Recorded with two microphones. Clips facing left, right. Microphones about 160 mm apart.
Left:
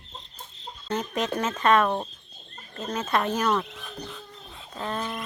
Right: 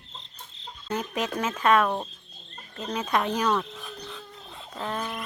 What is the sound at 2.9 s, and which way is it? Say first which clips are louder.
Speech: even; 10° right (ahead or behind).